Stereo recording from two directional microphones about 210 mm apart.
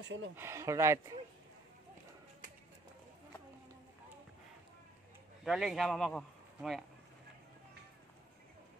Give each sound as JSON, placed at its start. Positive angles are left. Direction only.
{"t": 0.0, "sound": "speech", "side_deg": -60}
{"t": 0.4, "sound": "speech", "side_deg": -15}
{"t": 5.4, "sound": "speech", "side_deg": 0}